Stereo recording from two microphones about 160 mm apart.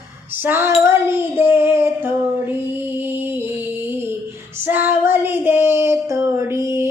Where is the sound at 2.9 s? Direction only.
15° right (ahead or behind).